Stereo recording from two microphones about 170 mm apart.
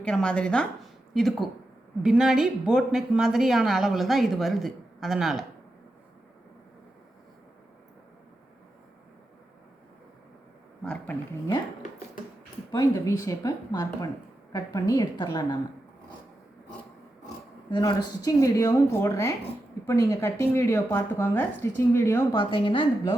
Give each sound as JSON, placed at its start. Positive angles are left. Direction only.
{"t": 0.0, "sound": "a woman's voice", "side_deg": 5}
{"t": 10.8, "sound": "speech", "side_deg": 10}
{"t": 12.7, "sound": "a woman's voice", "side_deg": 20}
{"t": 17.2, "sound": "speech", "side_deg": 25}
{"t": 22.4, "sound": "a woman's voice", "side_deg": 30}